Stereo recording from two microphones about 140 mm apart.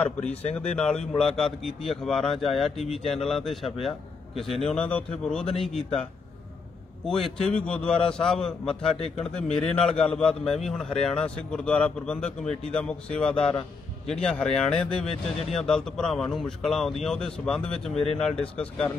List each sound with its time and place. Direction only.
0.6 s speech: 10° left (ahead or behind)
7.1 s speech: centre (ahead or behind)
8.9 s speech: 45° left (ahead or behind)
9.2 s speech: 5° left (ahead or behind)
17.9 s speech: 45° left (ahead or behind)
18.4 s speech: 10° left (ahead or behind)